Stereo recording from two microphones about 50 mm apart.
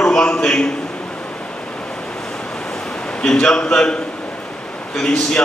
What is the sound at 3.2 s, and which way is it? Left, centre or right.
Speech, centre.